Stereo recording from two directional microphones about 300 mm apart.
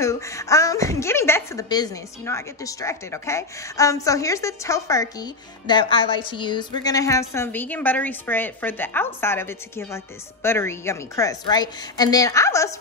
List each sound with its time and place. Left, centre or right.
0.0 s speech: centre